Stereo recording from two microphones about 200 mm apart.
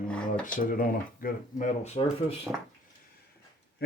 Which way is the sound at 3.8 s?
55° left (ahead or behind).